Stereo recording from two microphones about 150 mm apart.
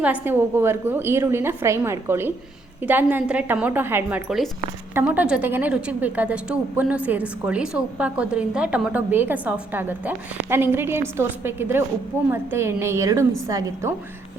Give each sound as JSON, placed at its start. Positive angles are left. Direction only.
{"t": 0.0, "sound": "a woman's voice", "side_deg": -10}